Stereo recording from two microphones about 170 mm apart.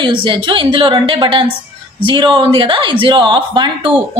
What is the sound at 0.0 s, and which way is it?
A woman's voice, 30° right (ahead or behind).